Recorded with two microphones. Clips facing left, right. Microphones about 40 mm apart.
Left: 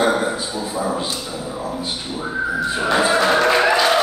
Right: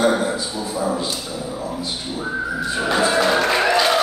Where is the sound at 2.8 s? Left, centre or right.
Centre.